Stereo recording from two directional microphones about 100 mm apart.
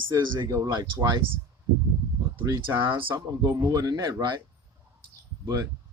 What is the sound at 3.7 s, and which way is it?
Speech, 40° right (ahead or behind).